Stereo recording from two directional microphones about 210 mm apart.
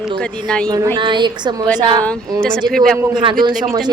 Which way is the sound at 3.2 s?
20° right (ahead or behind).